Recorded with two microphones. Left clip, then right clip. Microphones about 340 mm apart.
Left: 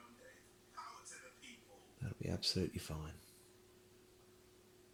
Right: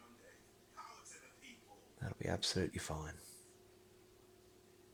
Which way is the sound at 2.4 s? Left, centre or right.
Centre.